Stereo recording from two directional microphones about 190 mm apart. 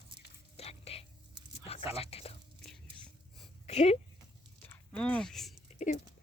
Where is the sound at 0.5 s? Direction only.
30° left (ahead or behind).